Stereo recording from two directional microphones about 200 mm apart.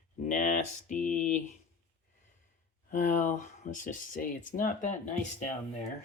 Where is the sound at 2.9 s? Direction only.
40° left (ahead or behind).